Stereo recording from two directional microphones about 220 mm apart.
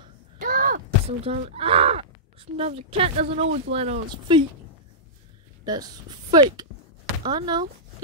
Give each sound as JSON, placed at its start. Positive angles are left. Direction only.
{"t": 0.4, "sound": "a sound", "side_deg": -40}
{"t": 1.2, "sound": "speech", "side_deg": -25}
{"t": 5.7, "sound": "speech", "side_deg": -20}